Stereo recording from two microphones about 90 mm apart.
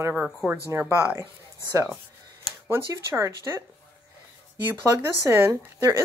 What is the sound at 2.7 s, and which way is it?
Speech, 30° right (ahead or behind).